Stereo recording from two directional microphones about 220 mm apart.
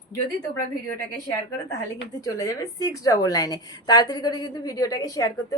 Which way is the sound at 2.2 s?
15° left (ahead or behind).